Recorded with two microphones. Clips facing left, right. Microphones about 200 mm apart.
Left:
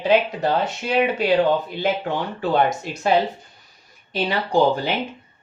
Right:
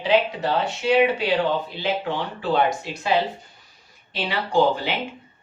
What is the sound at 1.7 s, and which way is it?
Speech, 50° left (ahead or behind).